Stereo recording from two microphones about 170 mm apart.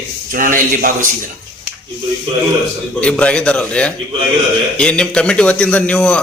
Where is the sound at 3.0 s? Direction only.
5° left (ahead or behind).